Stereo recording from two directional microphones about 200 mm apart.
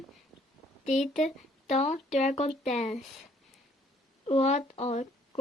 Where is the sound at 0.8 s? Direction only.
35° left (ahead or behind).